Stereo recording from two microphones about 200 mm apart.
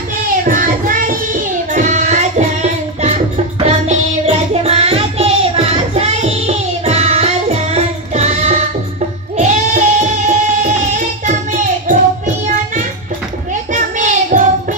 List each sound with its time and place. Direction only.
0.4 s child singing: 40° right (ahead or behind)
9.4 s music: 35° right (ahead or behind)
13.7 s a sound: 40° right (ahead or behind)